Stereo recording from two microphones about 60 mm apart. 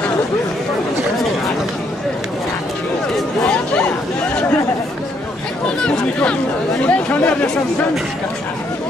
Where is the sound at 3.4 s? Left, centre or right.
Centre.